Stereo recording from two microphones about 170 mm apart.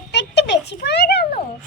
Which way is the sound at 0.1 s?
85° left.